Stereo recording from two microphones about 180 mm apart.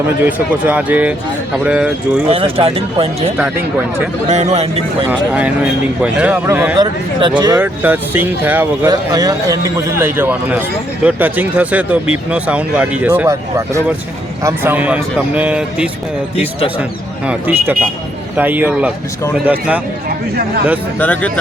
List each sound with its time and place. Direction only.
0.3 s speech: 10° right (ahead or behind)
2.2 s speech: 30° right (ahead or behind)
5.0 s speech: 10° right (ahead or behind)
6.7 s speech: 25° right (ahead or behind)
7.6 s speech: 10° right (ahead or behind)
8.9 s speech: 20° right (ahead or behind)
14.4 s speech: 10° right (ahead or behind)
17.2 s speech: 10° right (ahead or behind)
21.0 s speech: 10° left (ahead or behind)